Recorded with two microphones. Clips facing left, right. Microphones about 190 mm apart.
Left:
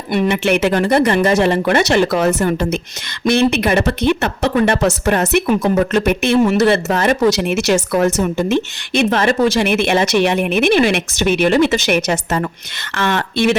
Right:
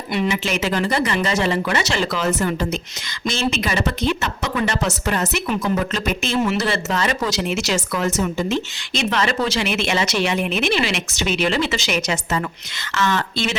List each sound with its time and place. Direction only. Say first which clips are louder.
0.1 s speech: left 7 dB; 55° left (ahead or behind)